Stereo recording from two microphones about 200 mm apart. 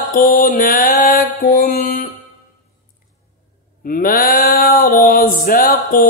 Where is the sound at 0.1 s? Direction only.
45° left (ahead or behind).